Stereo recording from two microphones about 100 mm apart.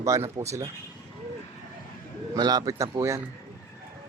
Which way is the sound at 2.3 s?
40° right (ahead or behind).